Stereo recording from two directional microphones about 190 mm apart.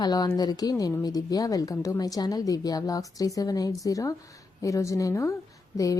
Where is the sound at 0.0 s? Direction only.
20° left (ahead or behind).